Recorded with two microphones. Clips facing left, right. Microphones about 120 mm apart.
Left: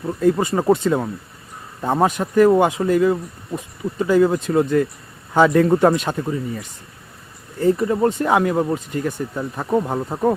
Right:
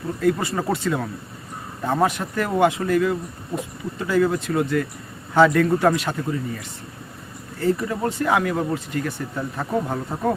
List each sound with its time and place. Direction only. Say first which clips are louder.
0.2 s speech: left 4 dB; 20° left (ahead or behind)
7.6 s speech: left 5 dB; 20° left (ahead or behind)